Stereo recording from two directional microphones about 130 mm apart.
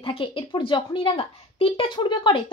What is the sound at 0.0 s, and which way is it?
A woman's voice, 45° left (ahead or behind).